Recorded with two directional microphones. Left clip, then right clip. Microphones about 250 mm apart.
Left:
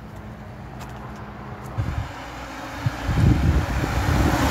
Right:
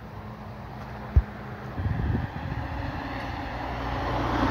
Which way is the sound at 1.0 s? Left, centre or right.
Right.